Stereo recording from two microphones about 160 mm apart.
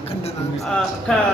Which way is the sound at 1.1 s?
5° left (ahead or behind).